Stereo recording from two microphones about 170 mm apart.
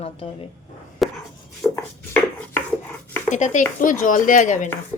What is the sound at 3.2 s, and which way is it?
Speech, 45° left (ahead or behind).